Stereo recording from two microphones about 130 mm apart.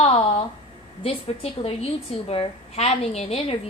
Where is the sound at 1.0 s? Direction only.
50° left (ahead or behind).